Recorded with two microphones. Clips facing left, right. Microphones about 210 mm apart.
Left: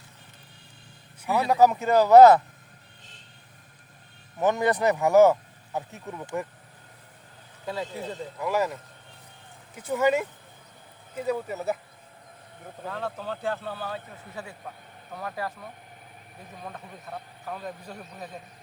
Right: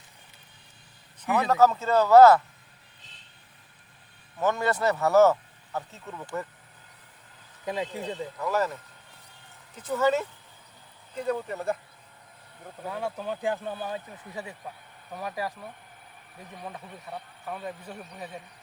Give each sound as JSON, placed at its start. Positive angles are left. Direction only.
{"t": 1.2, "sound": "speech", "side_deg": 10}
{"t": 4.4, "sound": "speech", "side_deg": 15}
{"t": 7.6, "sound": "speech", "side_deg": -15}
{"t": 8.0, "sound": "speech", "side_deg": 10}
{"t": 9.7, "sound": "speech", "side_deg": 10}
{"t": 12.8, "sound": "speech", "side_deg": -10}
{"t": 16.6, "sound": "speech", "side_deg": -10}